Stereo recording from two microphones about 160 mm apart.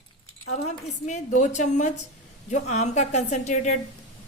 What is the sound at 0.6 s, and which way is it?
A woman's voice, 45° left (ahead or behind).